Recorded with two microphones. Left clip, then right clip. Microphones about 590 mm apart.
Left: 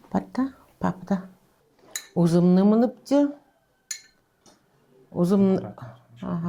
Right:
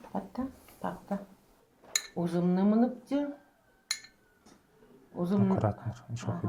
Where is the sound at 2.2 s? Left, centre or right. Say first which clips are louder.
Left 12 dB; left.